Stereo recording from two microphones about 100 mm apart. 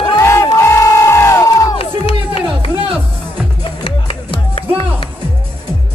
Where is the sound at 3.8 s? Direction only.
65° left (ahead or behind).